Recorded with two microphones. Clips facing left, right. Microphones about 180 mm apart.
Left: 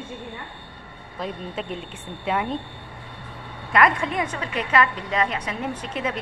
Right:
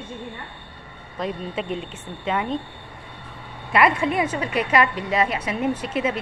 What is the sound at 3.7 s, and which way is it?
A woman's voice, 5° right (ahead or behind).